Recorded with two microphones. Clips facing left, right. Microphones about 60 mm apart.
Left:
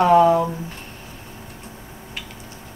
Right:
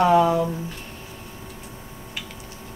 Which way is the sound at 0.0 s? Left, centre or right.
Left.